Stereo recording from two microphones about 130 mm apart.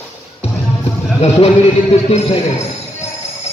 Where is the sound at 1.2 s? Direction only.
55° left (ahead or behind).